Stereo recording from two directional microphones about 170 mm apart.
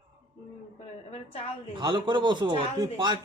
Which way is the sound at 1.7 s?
25° right (ahead or behind).